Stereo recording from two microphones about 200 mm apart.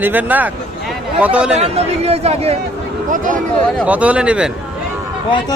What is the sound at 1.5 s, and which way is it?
Speech, 30° right (ahead or behind).